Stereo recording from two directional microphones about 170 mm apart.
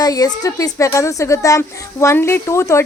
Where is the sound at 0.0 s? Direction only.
20° left (ahead or behind).